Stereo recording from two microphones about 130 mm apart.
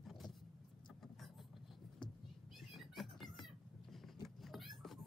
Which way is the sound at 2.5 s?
Centre (ahead or behind).